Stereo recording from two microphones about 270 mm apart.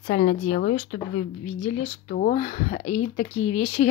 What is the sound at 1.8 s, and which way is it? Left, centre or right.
Speech, left.